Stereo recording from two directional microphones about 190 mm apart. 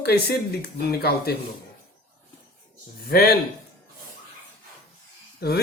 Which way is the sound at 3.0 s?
55° left (ahead or behind).